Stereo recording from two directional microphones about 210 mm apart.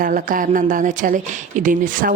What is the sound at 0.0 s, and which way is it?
Speech, 40° right (ahead or behind).